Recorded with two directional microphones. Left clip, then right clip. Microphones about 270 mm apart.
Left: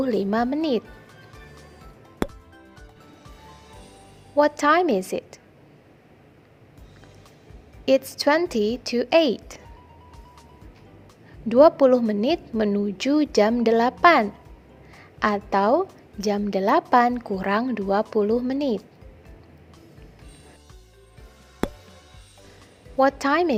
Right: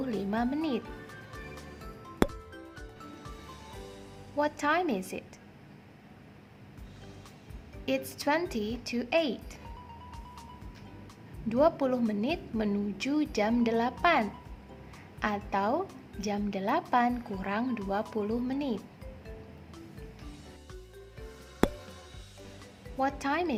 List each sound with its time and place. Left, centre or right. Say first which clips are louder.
0.0 s a woman's voice: left 10 dB; left
1.3 s music: right 1 dB; centre
4.4 s a woman's voice: left 10 dB; left
7.9 s a woman's voice: left 11 dB; left
11.4 s a woman's voice: left 11 dB; left
21.6 s music: even; centre
23.0 s a woman's voice: left 11 dB; left